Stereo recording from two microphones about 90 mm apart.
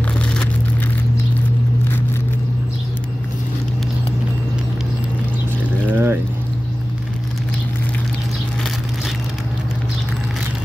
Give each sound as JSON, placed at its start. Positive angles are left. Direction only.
{"t": 5.9, "sound": "pour", "side_deg": -20}